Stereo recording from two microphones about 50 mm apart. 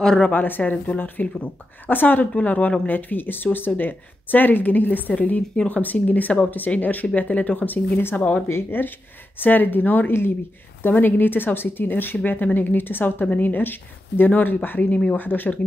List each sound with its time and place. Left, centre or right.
0.3 s speech: left
8.5 s speech: left
9.4 s speech: left